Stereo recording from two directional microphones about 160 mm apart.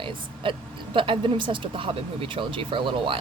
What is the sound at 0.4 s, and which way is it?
Speech, 30° right (ahead or behind).